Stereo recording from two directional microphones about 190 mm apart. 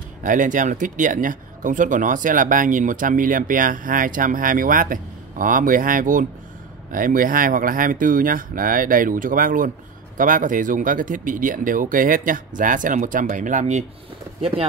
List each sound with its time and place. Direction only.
0.2 s speech: 45° right (ahead or behind)